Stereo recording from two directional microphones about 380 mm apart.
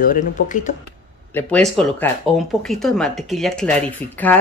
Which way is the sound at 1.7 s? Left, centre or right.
Centre.